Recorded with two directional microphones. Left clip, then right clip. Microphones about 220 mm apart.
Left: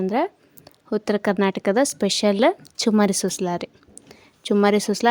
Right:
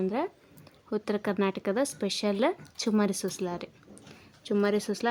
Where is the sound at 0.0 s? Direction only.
30° left (ahead or behind).